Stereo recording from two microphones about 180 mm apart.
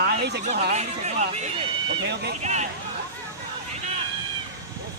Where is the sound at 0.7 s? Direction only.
40° right (ahead or behind).